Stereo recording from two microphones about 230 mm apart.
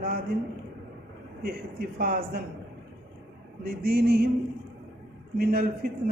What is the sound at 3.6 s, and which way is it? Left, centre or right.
Speech, right.